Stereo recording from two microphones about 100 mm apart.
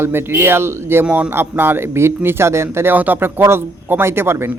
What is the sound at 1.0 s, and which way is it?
Speech, 10° right (ahead or behind).